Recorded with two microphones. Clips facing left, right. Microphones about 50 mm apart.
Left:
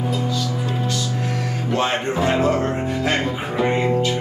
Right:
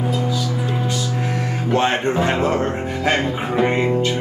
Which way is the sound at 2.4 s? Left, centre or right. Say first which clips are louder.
Even; right.